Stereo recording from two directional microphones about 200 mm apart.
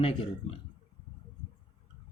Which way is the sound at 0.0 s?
30° left (ahead or behind).